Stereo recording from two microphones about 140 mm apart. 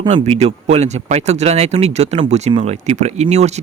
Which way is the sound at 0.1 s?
50° right (ahead or behind).